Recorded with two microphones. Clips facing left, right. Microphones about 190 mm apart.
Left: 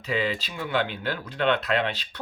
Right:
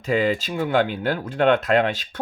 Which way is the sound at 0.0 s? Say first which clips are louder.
Right 6 dB; 45° right (ahead or behind).